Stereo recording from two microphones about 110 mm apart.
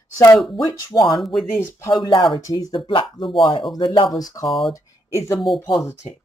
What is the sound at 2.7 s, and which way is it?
Speech, 50° left (ahead or behind).